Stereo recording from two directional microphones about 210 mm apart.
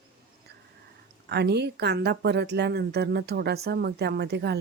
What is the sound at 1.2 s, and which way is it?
A woman's voice, 55° right (ahead or behind).